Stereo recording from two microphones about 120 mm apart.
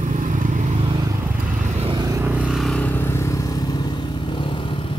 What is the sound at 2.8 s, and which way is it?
Vehicle, 15° left (ahead or behind).